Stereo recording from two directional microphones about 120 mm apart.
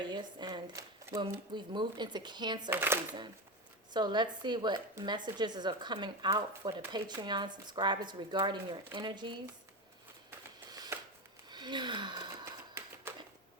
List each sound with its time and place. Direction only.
0.0 s speech: 40° right (ahead or behind)
2.6 s speech: 15° right (ahead or behind)
3.9 s speech: 35° right (ahead or behind)
10.7 s a sound: 35° right (ahead or behind)
11.4 s wheeze: 40° right (ahead or behind)
12.8 s a sound: 25° right (ahead or behind)